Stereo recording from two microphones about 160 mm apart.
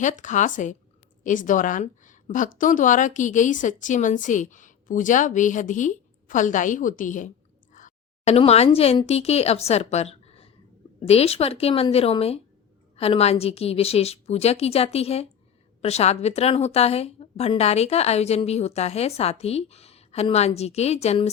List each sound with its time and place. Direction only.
0.0 s a woman's voice: 50° left (ahead or behind)